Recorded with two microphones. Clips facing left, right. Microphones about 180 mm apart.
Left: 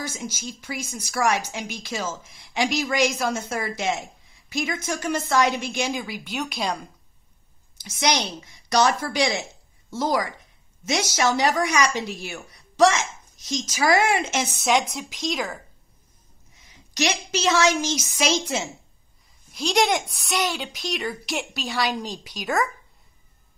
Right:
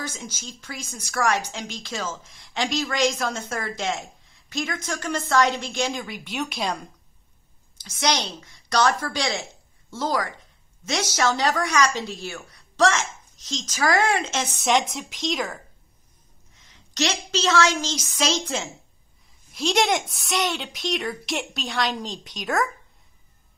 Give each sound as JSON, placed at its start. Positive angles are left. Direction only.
{"t": 0.0, "sound": "speech", "side_deg": 10}
{"t": 7.8, "sound": "speech", "side_deg": 15}
{"t": 14.6, "sound": "a woman's voice", "side_deg": 0}
{"t": 16.6, "sound": "speech", "side_deg": 10}
{"t": 19.5, "sound": "a woman's voice", "side_deg": 0}